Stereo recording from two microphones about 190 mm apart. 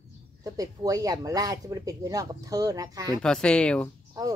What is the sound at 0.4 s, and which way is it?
Speech, 20° right (ahead or behind).